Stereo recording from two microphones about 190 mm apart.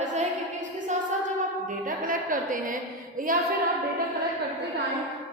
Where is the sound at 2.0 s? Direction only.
45° right (ahead or behind).